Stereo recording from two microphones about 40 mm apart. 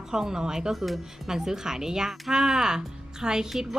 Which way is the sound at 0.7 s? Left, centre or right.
Centre.